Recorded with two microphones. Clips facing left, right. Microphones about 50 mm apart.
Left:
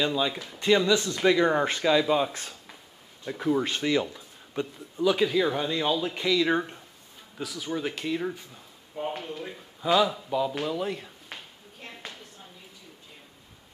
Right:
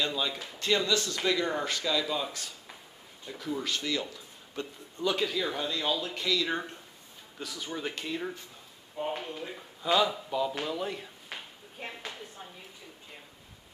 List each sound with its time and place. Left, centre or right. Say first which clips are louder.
0.0 s speech: left 5 dB; centre; by 2.2 s left
3.3 s speech: left 8 dB; left
4.0 s a sound: left 5 dB; centre
5.0 s speech: left 6 dB; centre
7.3 s speech: left 5 dB; centre
11.9 s a sound: left 3 dB; centre